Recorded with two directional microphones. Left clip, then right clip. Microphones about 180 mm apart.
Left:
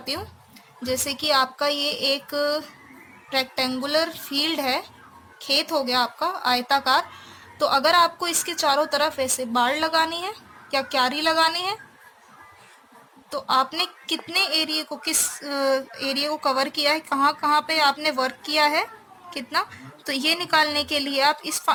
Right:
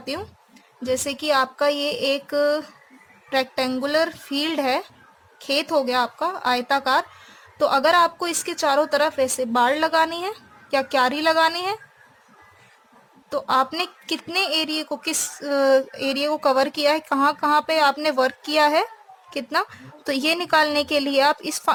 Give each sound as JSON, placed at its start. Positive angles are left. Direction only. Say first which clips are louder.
{"t": 0.0, "sound": "a woman's voice", "louder": "even", "side_deg": -40}
{"t": 13.3, "sound": "a woman's voice", "louder": "right 1 dB", "side_deg": -45}